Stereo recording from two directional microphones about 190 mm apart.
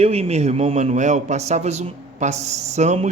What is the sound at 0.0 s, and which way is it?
A man's voice, 30° right (ahead or behind).